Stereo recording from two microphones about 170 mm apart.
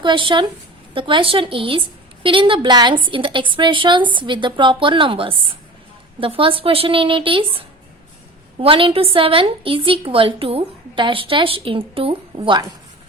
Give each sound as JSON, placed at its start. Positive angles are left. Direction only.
{"t": 0.0, "sound": "a woman's voice", "side_deg": -30}